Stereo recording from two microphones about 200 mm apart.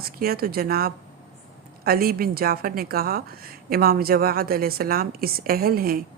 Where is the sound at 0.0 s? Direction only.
50° right (ahead or behind).